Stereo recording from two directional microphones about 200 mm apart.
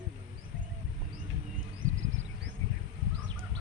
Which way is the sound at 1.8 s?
80° right.